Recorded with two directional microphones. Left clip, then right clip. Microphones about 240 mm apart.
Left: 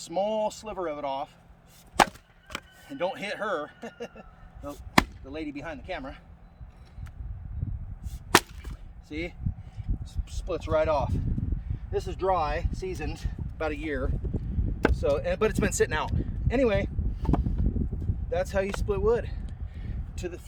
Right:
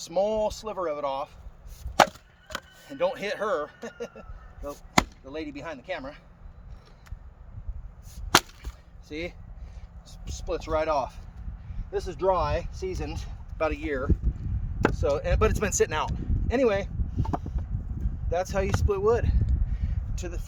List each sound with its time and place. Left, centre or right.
0.0 s speech: centre
2.0 s wood: centre
2.6 s speech: centre
8.3 s wood: centre
9.0 s speech: right; by 17.5 s centre
18.3 s a sound: centre